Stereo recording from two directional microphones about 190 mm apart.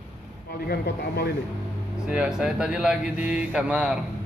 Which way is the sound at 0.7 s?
55° left (ahead or behind).